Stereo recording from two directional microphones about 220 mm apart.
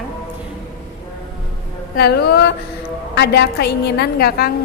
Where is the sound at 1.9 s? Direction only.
45° left (ahead or behind).